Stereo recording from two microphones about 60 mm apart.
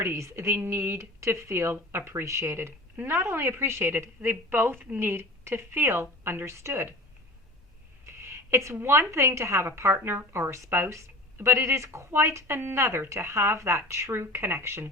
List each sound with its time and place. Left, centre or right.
0.0 s a woman's voice: right
2.2 s a woman's voice: right
8.0 s a sound: right
8.7 s a woman's voice: right